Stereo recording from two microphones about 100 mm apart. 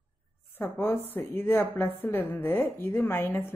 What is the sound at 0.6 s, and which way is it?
A woman's voice, 25° left (ahead or behind).